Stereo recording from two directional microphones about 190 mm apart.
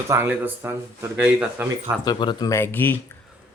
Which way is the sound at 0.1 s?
10° right (ahead or behind).